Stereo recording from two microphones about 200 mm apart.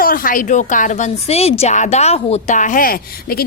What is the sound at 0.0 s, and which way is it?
A woman's voice, 45° left (ahead or behind).